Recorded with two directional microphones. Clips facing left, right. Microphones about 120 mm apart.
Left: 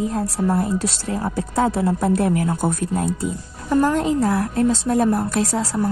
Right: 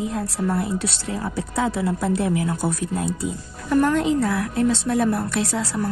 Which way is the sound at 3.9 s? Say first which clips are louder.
Left 1 dB; 40° left (ahead or behind).